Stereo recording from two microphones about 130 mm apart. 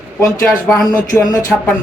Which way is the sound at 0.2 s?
25° left (ahead or behind).